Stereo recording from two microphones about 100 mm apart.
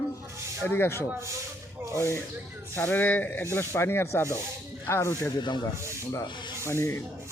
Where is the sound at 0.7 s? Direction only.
25° left (ahead or behind).